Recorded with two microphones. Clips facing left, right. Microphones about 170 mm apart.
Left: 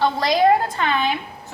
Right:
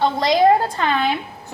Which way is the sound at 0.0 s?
20° right (ahead or behind).